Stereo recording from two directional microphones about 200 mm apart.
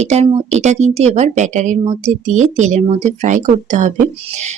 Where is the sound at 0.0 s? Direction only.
35° right (ahead or behind).